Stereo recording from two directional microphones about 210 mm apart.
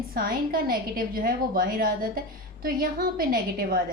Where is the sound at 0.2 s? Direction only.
45° right (ahead or behind).